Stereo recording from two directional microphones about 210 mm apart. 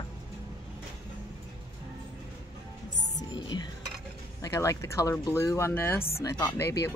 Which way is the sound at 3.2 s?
20° left (ahead or behind).